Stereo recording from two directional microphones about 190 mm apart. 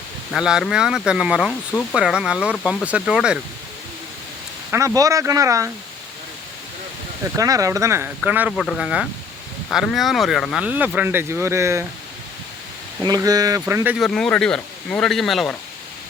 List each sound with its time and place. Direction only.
0.3 s speech: 5° right (ahead or behind)
4.7 s speech: 15° right (ahead or behind)
7.3 s speech: 15° right (ahead or behind)
13.0 s speech: 20° right (ahead or behind)
13.9 s speech: centre (ahead or behind)